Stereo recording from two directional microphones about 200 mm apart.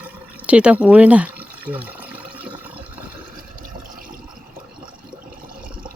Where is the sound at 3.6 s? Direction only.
45° right (ahead or behind).